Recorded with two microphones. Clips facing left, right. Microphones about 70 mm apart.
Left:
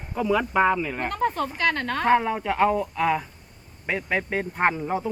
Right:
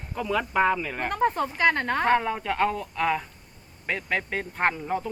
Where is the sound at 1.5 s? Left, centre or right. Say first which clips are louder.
Right 2 dB; right.